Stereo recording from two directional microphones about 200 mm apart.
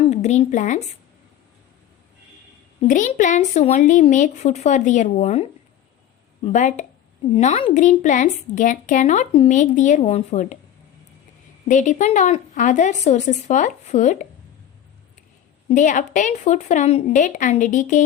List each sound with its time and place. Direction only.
0.1 s speech: 35° left (ahead or behind)
2.8 s a woman's voice: 40° left (ahead or behind)
11.7 s a woman's voice: 40° left (ahead or behind)
15.7 s a woman's voice: 40° left (ahead or behind)